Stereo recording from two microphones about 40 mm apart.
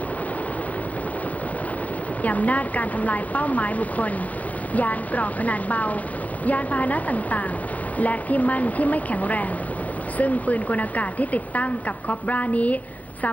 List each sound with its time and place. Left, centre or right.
2.2 s speech: left